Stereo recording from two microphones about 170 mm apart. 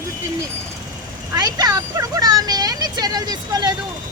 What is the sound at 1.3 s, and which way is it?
Speech, 20° right (ahead or behind).